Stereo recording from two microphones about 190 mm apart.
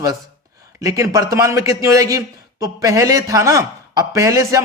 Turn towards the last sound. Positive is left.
turn(degrees=-15)  # may be behind; listen again after turning